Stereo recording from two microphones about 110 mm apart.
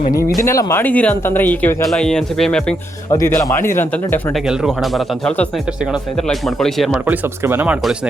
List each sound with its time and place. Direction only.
0.4 s speech: 30° left (ahead or behind)
0.8 s speech: 15° left (ahead or behind)
1.9 s speech: 5° left (ahead or behind)
3.1 s a man's voice: 30° left (ahead or behind)
4.3 s speech: centre (ahead or behind)
7.0 s speech: 20° right (ahead or behind)